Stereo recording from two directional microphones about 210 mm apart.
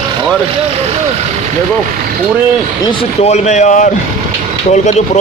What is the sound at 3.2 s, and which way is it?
Speech, 35° left (ahead or behind).